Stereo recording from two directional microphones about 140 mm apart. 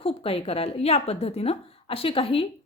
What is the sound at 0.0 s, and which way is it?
Speech, 40° left (ahead or behind).